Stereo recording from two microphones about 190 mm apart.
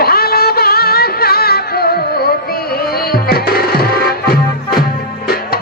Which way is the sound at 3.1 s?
55° left (ahead or behind).